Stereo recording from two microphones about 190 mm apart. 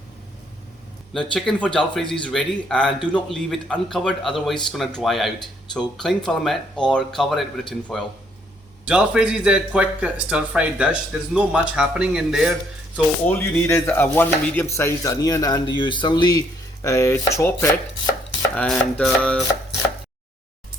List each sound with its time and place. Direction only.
1.1 s speech: 5° left (ahead or behind)
13.2 s speech: 10° left (ahead or behind)